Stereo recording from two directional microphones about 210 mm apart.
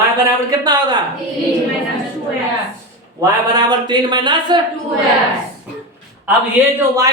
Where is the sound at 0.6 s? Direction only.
20° right (ahead or behind).